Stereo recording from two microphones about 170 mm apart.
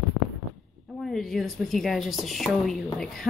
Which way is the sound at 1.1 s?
Centre (ahead or behind).